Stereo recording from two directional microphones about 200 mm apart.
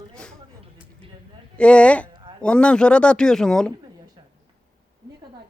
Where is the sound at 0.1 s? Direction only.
5° left (ahead or behind).